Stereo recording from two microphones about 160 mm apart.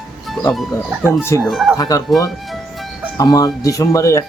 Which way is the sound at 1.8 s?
20° left (ahead or behind).